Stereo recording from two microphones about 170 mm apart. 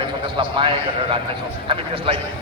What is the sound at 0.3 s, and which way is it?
A man's voice, 30° right (ahead or behind).